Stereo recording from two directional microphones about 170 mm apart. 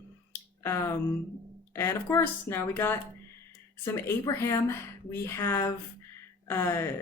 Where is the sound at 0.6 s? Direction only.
15° left (ahead or behind).